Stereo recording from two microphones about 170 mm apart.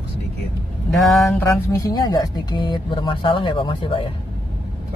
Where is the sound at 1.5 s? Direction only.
20° left (ahead or behind).